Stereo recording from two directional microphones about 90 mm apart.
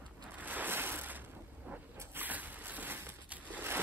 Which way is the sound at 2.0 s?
25° right (ahead or behind).